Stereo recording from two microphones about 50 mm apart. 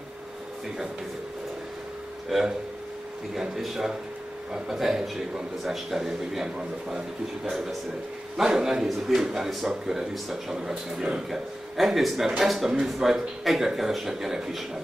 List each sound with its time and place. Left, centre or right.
2.3 s a man's voice: centre
11.2 s speech: centre